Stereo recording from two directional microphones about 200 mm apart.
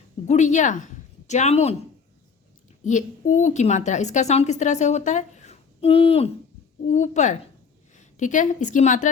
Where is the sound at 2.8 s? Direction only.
40° left (ahead or behind).